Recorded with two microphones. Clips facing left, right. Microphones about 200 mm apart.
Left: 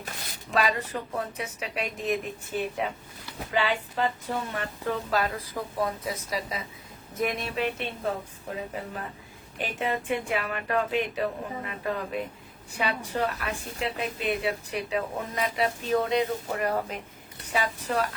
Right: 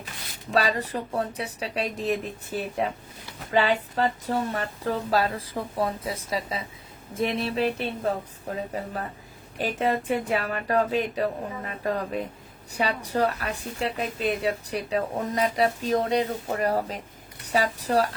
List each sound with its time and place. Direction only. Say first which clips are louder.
0.5 s a woman's voice: right 2 dB; 35° right (ahead or behind)
9.6 s a woman's voice: right 4 dB; 40° right (ahead or behind)